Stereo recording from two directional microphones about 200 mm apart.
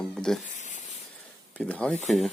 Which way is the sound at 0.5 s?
35° left (ahead or behind).